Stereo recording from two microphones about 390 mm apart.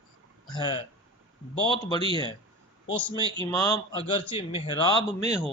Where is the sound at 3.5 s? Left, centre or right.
Centre.